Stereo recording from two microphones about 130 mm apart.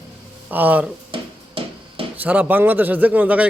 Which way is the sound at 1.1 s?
45° right (ahead or behind).